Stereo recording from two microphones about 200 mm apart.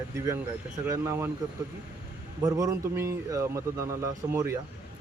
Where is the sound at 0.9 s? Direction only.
15° right (ahead or behind).